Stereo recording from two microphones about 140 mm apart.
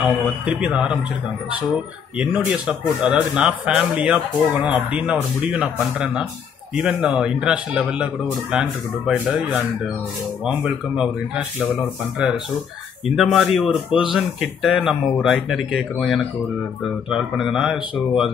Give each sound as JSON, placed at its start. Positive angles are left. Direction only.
{"t": 0.5, "sound": "speech", "side_deg": -10}
{"t": 2.1, "sound": "speech", "side_deg": -5}
{"t": 10.4, "sound": "speech", "side_deg": -10}
{"t": 13.8, "sound": "speech", "side_deg": 35}
{"t": 14.1, "sound": "speech", "side_deg": -5}